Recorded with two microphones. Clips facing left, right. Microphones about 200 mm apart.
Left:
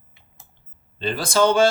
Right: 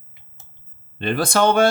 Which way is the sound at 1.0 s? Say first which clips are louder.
Right 1 dB; 60° right (ahead or behind).